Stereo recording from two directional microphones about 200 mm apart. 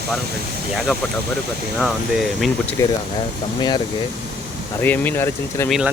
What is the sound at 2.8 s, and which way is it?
Speech, 15° left (ahead or behind).